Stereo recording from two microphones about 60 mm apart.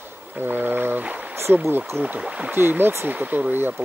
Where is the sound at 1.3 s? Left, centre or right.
Right.